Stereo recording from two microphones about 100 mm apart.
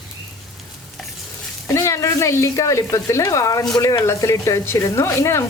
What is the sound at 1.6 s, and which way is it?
Speech, 30° left (ahead or behind).